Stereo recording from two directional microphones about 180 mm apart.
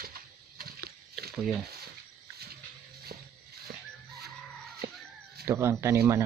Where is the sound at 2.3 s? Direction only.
60° right (ahead or behind).